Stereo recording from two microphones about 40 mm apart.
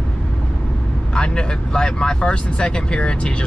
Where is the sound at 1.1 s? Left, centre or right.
Left.